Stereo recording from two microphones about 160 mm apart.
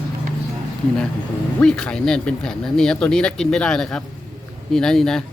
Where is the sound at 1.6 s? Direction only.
5° left (ahead or behind).